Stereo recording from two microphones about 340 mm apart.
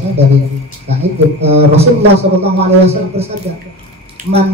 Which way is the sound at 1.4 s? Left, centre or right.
Centre.